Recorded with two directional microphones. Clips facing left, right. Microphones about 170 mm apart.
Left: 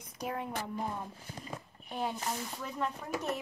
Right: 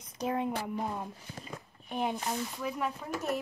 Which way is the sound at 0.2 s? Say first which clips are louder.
Right 5 dB; 20° right (ahead or behind).